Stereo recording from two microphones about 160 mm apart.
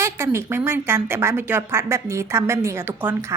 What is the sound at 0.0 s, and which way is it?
A woman's voice, 15° right (ahead or behind).